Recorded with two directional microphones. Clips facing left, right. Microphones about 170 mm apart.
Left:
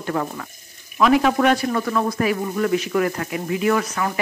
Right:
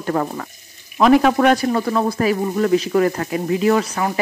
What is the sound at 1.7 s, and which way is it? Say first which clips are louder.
Speech: right 3 dB; 30° right (ahead or behind).